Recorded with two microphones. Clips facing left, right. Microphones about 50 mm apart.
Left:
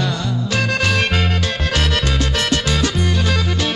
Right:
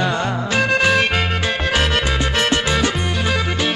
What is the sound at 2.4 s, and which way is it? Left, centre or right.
Music, right.